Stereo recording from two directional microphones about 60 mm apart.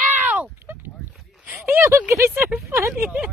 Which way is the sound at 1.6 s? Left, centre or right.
Right.